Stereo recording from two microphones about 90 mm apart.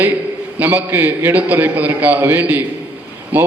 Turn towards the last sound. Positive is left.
turn(degrees=-20)  # may be behind; listen again after turning